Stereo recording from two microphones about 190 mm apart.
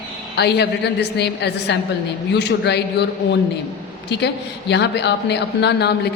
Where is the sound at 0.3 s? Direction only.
60° left (ahead or behind).